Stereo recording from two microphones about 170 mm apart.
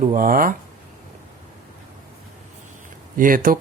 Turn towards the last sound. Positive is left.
turn(degrees=-55)  # may be behind; listen again after turning